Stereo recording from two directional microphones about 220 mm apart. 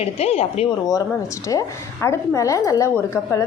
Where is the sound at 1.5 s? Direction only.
15° left (ahead or behind).